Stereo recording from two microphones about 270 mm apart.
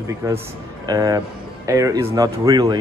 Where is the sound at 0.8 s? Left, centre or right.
Centre.